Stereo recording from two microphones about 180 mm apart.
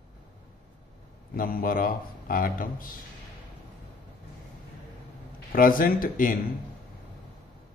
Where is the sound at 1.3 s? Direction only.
55° left (ahead or behind).